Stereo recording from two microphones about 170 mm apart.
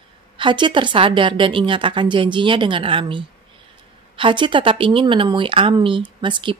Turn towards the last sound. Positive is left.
turn(degrees=-30)  # may be behind; listen again after turning